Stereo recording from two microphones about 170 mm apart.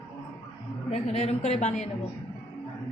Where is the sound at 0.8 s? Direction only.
40° left (ahead or behind).